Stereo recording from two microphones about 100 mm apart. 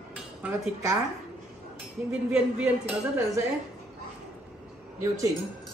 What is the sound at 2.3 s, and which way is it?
Speech, 15° right (ahead or behind).